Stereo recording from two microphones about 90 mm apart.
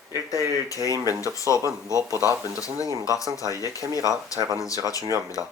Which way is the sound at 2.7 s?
40° left (ahead or behind).